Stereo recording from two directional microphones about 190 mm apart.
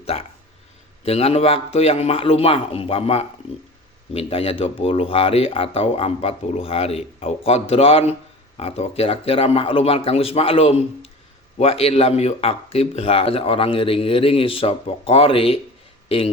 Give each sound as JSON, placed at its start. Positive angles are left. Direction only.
{"t": 0.0, "sound": "speech", "side_deg": 30}